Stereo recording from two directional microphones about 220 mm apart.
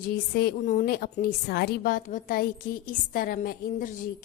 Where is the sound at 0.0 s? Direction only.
45° left (ahead or behind).